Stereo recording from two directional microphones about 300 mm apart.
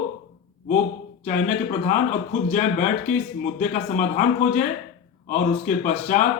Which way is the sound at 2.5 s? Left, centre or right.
Left.